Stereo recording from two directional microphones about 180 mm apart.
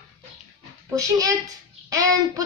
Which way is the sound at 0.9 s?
20° right (ahead or behind).